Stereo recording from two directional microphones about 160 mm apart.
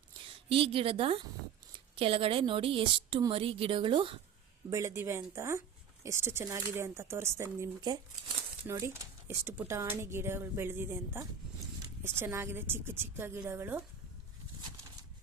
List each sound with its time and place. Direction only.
0.3 s a woman's voice: 35° right (ahead or behind)
4.7 s speech: 20° right (ahead or behind)